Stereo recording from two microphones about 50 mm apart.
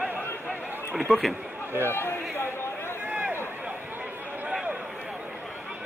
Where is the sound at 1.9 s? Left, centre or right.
Left.